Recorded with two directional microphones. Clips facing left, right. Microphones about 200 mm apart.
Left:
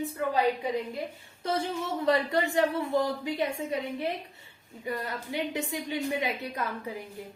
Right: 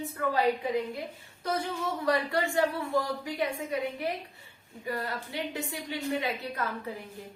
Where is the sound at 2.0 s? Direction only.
20° left (ahead or behind).